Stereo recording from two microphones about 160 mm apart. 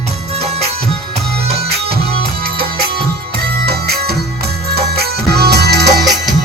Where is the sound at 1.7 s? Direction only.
75° right (ahead or behind); by 6.0 s 90° right.